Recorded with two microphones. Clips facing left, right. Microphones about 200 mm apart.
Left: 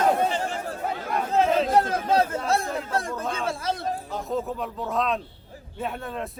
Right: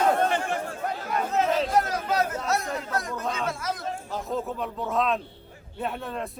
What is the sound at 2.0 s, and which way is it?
Chatter, 30° left (ahead or behind).